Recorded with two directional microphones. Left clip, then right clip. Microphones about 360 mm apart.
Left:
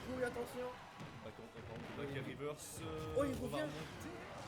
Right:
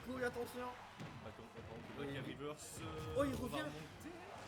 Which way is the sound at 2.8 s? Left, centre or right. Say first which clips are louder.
Left 1 dB; centre.